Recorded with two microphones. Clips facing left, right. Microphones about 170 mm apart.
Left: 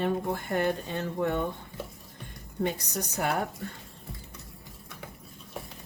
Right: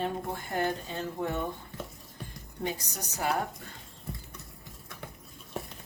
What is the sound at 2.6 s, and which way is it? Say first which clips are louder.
Speech: left 5 dB; 60° left (ahead or behind).